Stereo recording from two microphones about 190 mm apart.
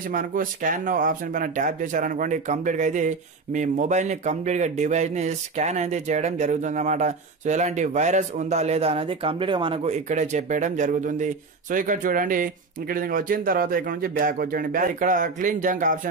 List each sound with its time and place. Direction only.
0.1 s speech: 45° right (ahead or behind)